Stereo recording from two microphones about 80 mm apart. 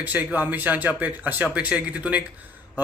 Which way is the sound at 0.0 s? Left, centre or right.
Right.